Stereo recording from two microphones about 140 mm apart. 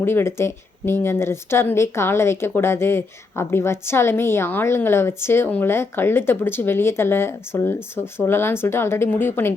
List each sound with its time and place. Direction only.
0.0 s a woman's voice: 15° left (ahead or behind)